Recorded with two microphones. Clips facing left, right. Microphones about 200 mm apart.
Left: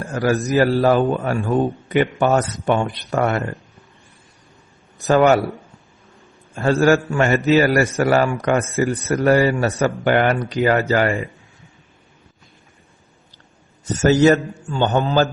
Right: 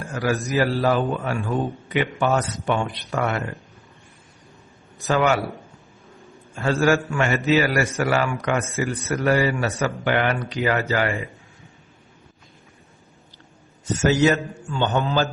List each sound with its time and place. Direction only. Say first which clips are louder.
0.0 s a man's voice: left 5 dB; 40° left (ahead or behind)
5.0 s a man's voice: left 6 dB; 45° left (ahead or behind)
6.6 s a man's voice: left 4 dB; 40° left (ahead or behind)
14.0 s a man's voice: left 5 dB; 40° left (ahead or behind)